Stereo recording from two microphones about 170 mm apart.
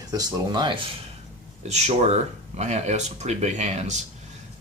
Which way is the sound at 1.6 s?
40° right (ahead or behind).